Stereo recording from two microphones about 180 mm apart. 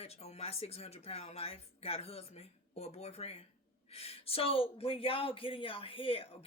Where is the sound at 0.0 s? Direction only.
35° left (ahead or behind).